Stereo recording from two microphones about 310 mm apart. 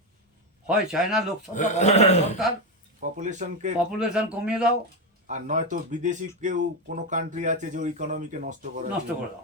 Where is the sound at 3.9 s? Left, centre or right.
Centre.